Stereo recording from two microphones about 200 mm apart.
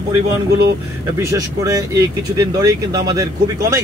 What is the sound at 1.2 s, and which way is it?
Speech, 15° right (ahead or behind).